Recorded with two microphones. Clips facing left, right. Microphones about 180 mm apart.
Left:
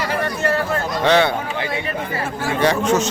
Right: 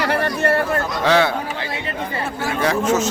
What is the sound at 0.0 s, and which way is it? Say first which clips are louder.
Chatter: right 2 dB; 65° right (ahead or behind).